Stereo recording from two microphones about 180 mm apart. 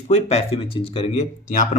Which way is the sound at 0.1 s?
35° left (ahead or behind).